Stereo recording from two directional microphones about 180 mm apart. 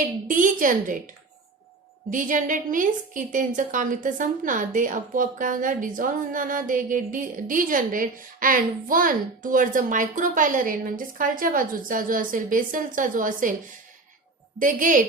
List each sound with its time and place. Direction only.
0.0 s a woman's voice: 45° right (ahead or behind)
2.0 s a woman's voice: 45° right (ahead or behind)
14.6 s a woman's voice: 45° right (ahead or behind)